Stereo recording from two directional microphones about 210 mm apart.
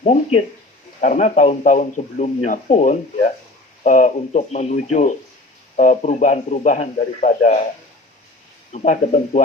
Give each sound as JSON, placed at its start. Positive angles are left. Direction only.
{"t": 0.0, "sound": "speech", "side_deg": 30}
{"t": 8.7, "sound": "speech", "side_deg": 35}